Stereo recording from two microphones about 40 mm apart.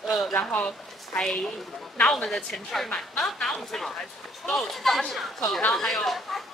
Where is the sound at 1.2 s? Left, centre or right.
Centre.